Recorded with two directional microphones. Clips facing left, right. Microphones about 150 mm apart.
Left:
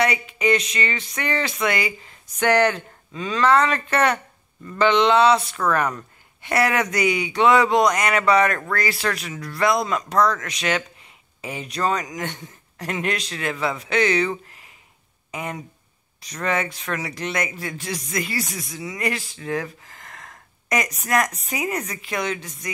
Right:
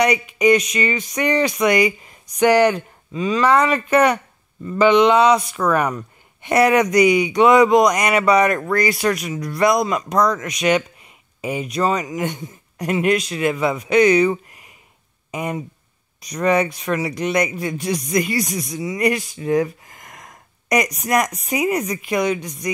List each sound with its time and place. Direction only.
0.0 s speech: 15° right (ahead or behind)